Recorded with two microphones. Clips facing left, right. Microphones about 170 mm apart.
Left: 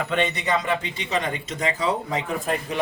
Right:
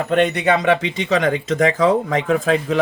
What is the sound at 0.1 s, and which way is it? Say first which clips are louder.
Speech: right 9 dB; 55° right (ahead or behind).